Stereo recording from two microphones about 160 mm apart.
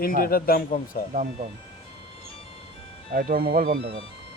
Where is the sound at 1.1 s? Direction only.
50° right (ahead or behind).